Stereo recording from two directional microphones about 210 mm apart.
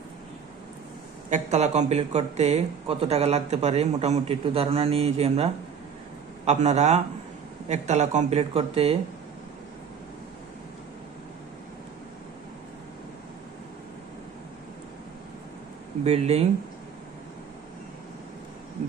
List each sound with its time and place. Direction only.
1.3 s speech: 35° right (ahead or behind)
16.0 s speech: 30° right (ahead or behind)